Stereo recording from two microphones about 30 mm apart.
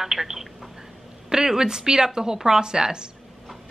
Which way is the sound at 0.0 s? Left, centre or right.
Centre.